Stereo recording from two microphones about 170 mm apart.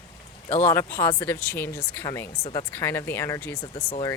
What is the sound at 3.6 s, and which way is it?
Speech, 35° left (ahead or behind).